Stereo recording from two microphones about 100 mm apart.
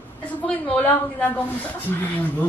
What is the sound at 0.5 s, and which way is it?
A woman's voice, 10° left (ahead or behind).